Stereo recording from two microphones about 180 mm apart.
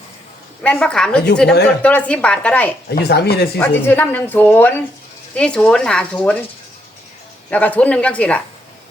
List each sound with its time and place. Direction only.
0.6 s speech: 5° left (ahead or behind)
2.9 s speech: 65° left (ahead or behind)
3.6 s speech: 10° left (ahead or behind)
7.5 s speech: 10° left (ahead or behind)